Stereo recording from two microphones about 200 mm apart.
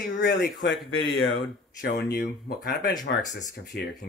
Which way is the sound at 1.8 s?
50° left (ahead or behind).